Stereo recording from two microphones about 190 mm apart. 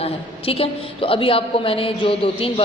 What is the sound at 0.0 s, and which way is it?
A woman's voice, 30° left (ahead or behind).